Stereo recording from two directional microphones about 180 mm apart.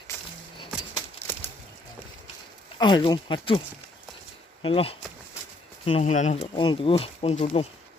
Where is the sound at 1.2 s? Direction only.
15° left (ahead or behind).